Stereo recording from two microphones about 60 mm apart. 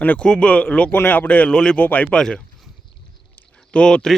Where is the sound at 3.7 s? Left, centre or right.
Centre.